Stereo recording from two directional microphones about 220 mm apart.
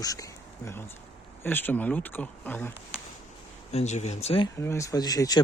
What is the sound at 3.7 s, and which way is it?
Speech, 30° left (ahead or behind).